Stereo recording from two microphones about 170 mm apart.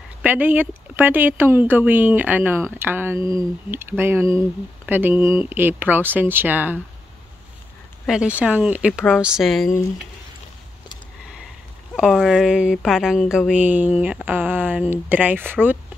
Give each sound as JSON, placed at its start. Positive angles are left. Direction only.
{"t": 0.2, "sound": "speech", "side_deg": -10}
{"t": 3.2, "sound": "speech", "side_deg": 30}
{"t": 3.7, "sound": "speech", "side_deg": -15}
{"t": 8.1, "sound": "speech", "side_deg": -5}
{"t": 11.9, "sound": "speech", "side_deg": 0}